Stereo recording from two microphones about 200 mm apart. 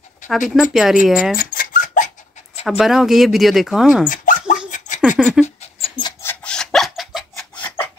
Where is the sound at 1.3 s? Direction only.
45° left (ahead or behind).